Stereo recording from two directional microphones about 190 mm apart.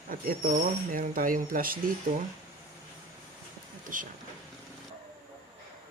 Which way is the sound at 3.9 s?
45° right (ahead or behind).